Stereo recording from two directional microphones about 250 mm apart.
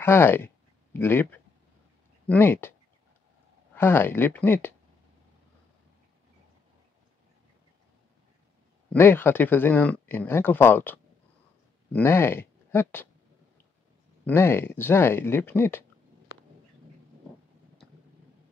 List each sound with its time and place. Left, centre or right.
0.0 s speech: centre
3.7 s speech: centre
8.9 s speech: centre
14.2 s speech: centre